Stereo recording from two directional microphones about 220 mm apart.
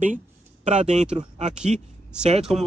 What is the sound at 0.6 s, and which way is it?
Speech, 35° right (ahead or behind).